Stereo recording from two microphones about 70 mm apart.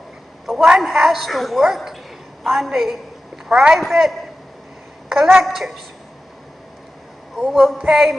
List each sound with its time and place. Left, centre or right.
0.5 s a woman's voice: centre
7.3 s speech: centre